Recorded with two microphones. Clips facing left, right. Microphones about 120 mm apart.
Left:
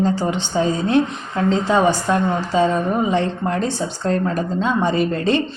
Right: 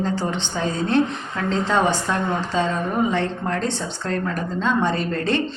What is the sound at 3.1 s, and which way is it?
Speech, 15° left (ahead or behind).